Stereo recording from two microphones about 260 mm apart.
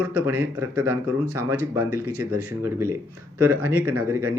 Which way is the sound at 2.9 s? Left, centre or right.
Right.